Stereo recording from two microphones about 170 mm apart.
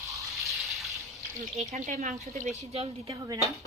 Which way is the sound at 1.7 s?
45° right (ahead or behind).